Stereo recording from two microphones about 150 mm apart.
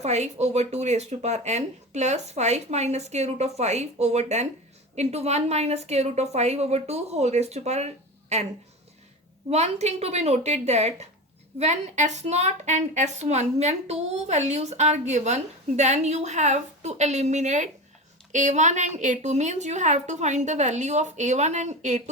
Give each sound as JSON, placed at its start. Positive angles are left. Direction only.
{"t": 0.0, "sound": "a woman's voice", "side_deg": -50}
{"t": 9.5, "sound": "a woman's voice", "side_deg": -45}